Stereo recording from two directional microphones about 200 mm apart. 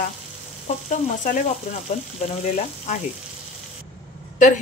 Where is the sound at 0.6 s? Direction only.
40° left (ahead or behind).